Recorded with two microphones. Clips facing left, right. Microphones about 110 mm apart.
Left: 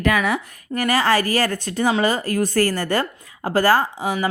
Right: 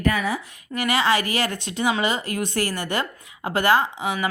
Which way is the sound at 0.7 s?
45° left (ahead or behind).